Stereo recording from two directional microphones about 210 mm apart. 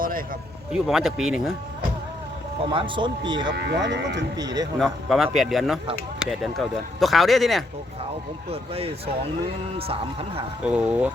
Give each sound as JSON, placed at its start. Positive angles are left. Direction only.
{"t": 0.0, "sound": "vehicle", "side_deg": -40}
{"t": 0.7, "sound": "speech", "side_deg": 0}
{"t": 2.7, "sound": "speech", "side_deg": -25}
{"t": 3.5, "sound": "speech", "side_deg": -55}
{"t": 4.4, "sound": "speech", "side_deg": -15}
{"t": 4.8, "sound": "speech", "side_deg": 0}
{"t": 8.4, "sound": "speech", "side_deg": -30}
{"t": 10.6, "sound": "speech", "side_deg": -5}